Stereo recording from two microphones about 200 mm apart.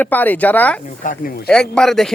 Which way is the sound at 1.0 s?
45° left (ahead or behind).